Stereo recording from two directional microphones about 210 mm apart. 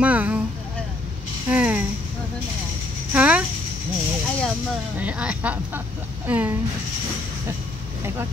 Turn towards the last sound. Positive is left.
turn(degrees=-10)  # may be behind; listen again after turning